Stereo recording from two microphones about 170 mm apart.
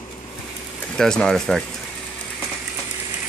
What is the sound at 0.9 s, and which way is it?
Speech, 5° left (ahead or behind).